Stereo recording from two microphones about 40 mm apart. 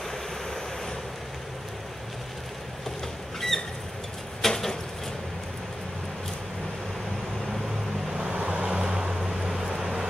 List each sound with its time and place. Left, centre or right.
3.3 s a sound: centre
4.4 s vehicle: centre
8.2 s vehicle: right
8.6 s waves: centre
9.3 s vehicle: centre